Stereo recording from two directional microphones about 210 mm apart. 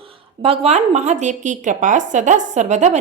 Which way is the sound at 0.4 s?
30° right (ahead or behind).